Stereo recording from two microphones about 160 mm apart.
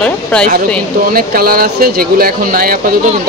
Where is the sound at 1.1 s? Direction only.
65° right (ahead or behind).